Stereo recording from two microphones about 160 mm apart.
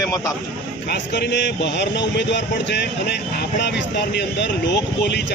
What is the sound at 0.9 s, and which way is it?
A man's voice, 90° left.